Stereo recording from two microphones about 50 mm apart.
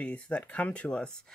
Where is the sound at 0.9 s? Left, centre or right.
Centre.